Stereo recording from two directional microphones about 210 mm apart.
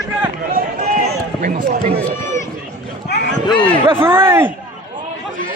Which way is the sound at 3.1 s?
60° left (ahead or behind).